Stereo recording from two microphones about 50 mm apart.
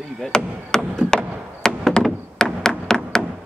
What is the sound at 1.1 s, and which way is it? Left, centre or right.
Chop, centre.